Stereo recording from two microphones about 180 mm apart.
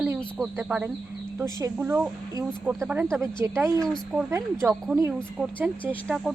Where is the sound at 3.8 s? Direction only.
5° left (ahead or behind).